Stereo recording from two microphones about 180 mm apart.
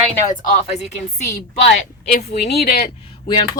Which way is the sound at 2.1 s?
40° left (ahead or behind).